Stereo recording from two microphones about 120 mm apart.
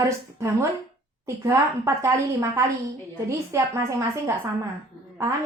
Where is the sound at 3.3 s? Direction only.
20° right (ahead or behind).